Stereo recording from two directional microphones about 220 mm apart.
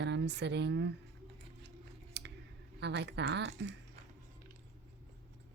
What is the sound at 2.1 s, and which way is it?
Clicking, 50° right (ahead or behind).